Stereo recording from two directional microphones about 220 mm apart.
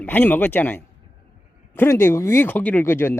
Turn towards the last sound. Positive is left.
turn(degrees=10)  # may be behind; listen again after turning